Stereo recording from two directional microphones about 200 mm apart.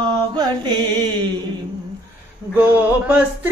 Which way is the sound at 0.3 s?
20° right (ahead or behind).